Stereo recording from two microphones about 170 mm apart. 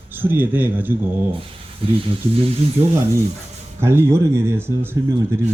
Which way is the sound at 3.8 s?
15° right (ahead or behind).